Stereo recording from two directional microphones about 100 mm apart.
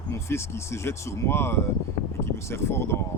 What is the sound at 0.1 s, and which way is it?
Speech, 25° left (ahead or behind).